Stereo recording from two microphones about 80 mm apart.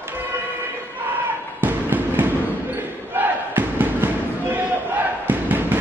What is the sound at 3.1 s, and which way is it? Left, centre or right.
Crowd, right.